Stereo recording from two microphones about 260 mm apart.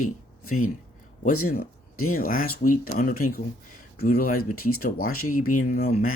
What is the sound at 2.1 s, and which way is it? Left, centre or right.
Speech, left.